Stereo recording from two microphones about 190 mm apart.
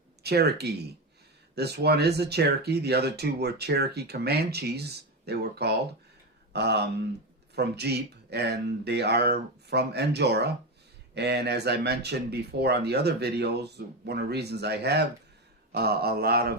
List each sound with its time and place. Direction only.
0.2 s speech: 60° right (ahead or behind)